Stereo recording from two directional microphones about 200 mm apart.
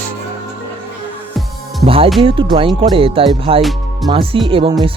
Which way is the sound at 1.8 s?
30° right (ahead or behind).